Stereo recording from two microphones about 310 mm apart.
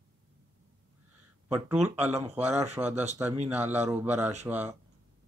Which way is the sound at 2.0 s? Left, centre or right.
Centre.